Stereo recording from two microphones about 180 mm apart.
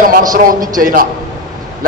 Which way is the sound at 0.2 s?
50° right (ahead or behind).